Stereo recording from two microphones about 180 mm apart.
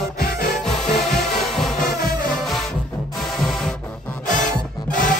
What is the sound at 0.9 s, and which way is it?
Music, centre (ahead or behind).